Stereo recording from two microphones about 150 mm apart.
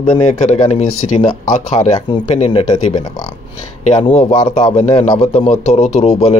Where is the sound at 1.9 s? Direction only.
30° left (ahead or behind).